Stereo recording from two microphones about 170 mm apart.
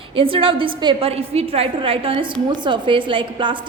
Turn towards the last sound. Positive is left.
turn(degrees=-30)  # may be behind; listen again after turning